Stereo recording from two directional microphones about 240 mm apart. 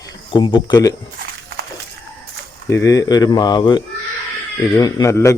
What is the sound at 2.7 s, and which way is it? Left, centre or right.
A man's voice, centre.